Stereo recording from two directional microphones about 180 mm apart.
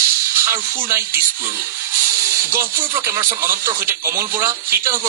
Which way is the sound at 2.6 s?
15° right (ahead or behind).